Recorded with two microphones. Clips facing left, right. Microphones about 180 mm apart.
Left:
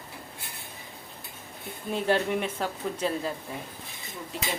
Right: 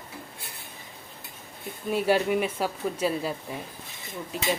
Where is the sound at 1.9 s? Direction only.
10° right (ahead or behind).